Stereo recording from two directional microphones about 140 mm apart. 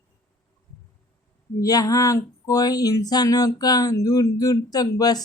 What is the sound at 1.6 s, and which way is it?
Speech, 25° left (ahead or behind).